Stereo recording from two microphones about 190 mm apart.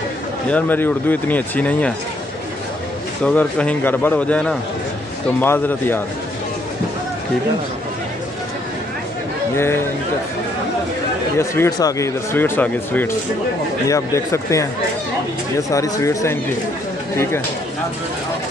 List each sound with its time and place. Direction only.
0.5 s speech: 10° left (ahead or behind)
3.3 s speech: 5° left (ahead or behind)
11.3 s speech: 15° left (ahead or behind)